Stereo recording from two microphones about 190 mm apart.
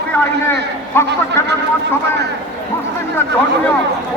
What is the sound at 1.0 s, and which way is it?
Speech, 15° left (ahead or behind).